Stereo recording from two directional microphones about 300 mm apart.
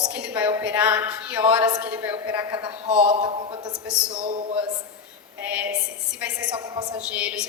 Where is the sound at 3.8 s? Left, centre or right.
Centre.